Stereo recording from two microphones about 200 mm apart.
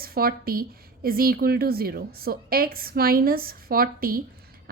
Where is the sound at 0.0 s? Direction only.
50° right (ahead or behind).